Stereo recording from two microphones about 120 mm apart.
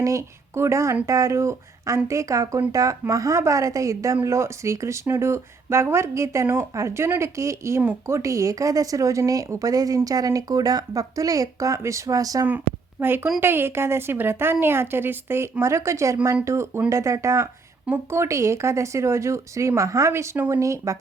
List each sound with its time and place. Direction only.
0.0 s a woman's voice: 25° right (ahead or behind)
12.5 s a woman's voice: 15° right (ahead or behind)